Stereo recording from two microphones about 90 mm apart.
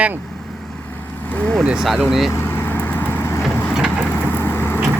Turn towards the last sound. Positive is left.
turn(degrees=20)  # may be behind; listen again after turning